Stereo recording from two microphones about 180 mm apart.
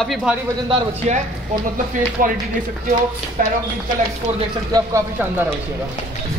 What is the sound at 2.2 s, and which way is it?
Speech, 50° right (ahead or behind).